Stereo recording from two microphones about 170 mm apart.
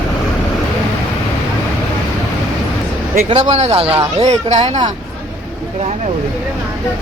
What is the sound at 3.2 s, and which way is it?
Speech, 40° right (ahead or behind).